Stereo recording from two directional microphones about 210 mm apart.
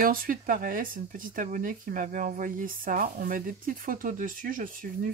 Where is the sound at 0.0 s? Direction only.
40° right (ahead or behind).